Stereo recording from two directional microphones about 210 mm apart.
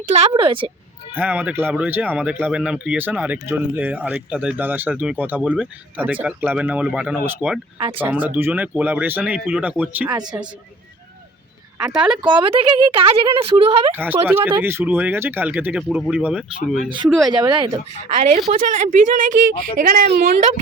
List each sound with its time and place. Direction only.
0.0 s speech: 30° right (ahead or behind)
1.2 s speech: 10° right (ahead or behind)
11.8 s speech: 5° right (ahead or behind)
12.2 s speech: 20° right (ahead or behind)
13.9 s speech: 10° right (ahead or behind)
17.2 s speech: 20° right (ahead or behind)
18.5 s a woman's voice: 40° right (ahead or behind)